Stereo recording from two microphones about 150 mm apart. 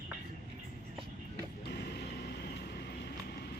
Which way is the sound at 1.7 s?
90° left.